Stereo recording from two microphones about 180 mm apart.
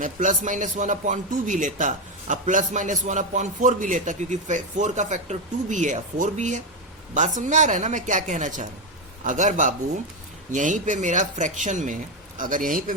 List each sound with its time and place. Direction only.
0.0 s a man's voice: 45° right (ahead or behind)